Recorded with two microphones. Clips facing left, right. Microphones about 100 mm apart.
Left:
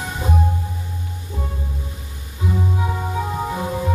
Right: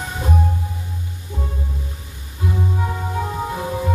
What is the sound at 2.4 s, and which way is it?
Music, centre (ahead or behind).